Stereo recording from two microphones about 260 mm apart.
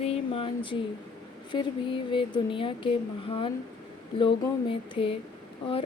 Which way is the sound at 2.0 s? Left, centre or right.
Centre.